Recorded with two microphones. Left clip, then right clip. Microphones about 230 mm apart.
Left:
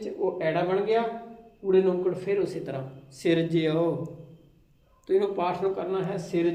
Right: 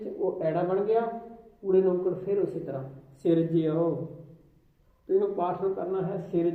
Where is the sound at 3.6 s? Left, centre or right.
Centre.